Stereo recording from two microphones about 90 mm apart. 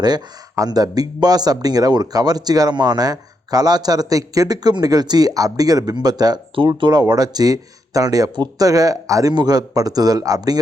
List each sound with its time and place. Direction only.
0.5 s a man's voice: 40° right (ahead or behind)
6.6 s speech: 65° right (ahead or behind)
7.0 s a man's voice: 45° right (ahead or behind)
9.3 s a man's voice: 50° right (ahead or behind)